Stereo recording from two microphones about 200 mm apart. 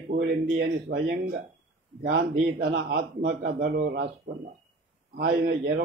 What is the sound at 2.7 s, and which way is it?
Speech, 55° right (ahead or behind).